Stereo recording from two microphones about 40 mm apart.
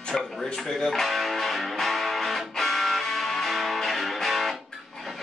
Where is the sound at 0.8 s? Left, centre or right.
Centre.